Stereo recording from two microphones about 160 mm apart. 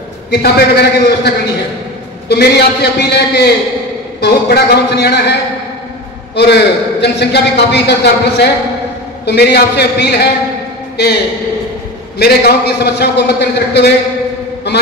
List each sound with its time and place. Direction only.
0.3 s a man's voice: 80° left
6.3 s a man's voice: 90° left
12.2 s a man's voice: 80° left